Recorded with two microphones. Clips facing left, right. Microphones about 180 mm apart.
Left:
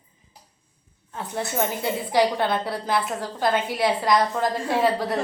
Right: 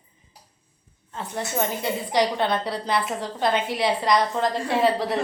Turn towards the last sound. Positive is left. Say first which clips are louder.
# even
turn(degrees=0)  # may be behind; listen again after turning